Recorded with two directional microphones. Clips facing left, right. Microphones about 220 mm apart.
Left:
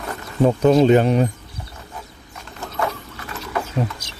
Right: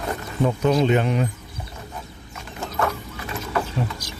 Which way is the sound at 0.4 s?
35° left (ahead or behind).